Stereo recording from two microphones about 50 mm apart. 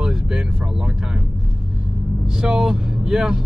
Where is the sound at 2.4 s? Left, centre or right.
Centre.